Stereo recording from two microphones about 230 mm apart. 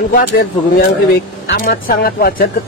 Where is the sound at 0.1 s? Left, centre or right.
Left.